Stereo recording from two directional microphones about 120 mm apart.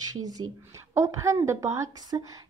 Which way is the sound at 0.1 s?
30° right (ahead or behind).